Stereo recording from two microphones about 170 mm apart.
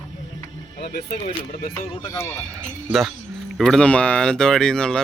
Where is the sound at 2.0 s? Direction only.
20° left (ahead or behind).